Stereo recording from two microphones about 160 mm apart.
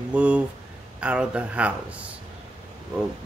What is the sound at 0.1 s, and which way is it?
Speech, 10° right (ahead or behind).